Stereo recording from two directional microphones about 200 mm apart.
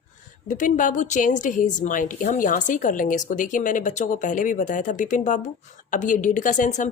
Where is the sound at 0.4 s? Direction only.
40° left (ahead or behind).